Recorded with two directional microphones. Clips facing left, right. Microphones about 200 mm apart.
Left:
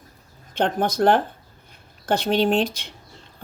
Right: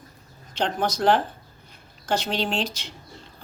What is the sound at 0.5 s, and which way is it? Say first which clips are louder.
Speech: left 3 dB; 55° left (ahead or behind).